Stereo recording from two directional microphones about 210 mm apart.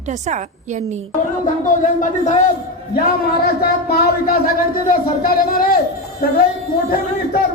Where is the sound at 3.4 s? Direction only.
45° left (ahead or behind).